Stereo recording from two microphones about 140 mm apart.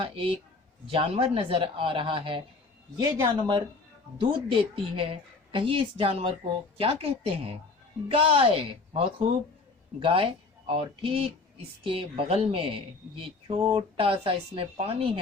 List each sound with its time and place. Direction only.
0.0 s speech: 45° right (ahead or behind)